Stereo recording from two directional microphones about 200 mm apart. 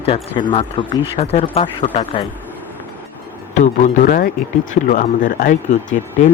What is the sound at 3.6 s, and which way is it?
Speech, 35° left (ahead or behind).